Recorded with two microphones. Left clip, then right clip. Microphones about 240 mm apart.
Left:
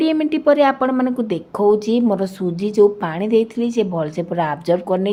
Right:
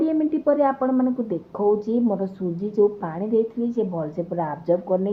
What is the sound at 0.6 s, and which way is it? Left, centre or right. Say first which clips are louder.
Speech: left 4 dB; left.